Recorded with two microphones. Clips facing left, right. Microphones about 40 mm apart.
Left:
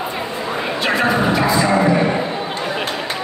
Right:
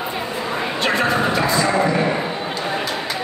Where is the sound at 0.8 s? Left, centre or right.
Centre.